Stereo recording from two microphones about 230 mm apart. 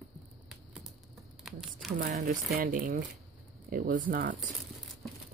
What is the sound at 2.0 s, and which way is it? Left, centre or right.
Speech, right.